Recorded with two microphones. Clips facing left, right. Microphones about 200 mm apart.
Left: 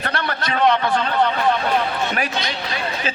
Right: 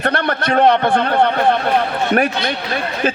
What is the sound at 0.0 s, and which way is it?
A man's voice, 55° right (ahead or behind).